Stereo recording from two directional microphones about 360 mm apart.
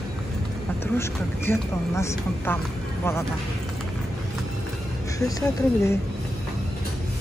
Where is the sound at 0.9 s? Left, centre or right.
Centre.